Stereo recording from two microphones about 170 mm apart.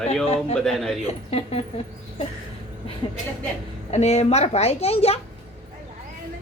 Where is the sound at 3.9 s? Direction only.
40° left (ahead or behind).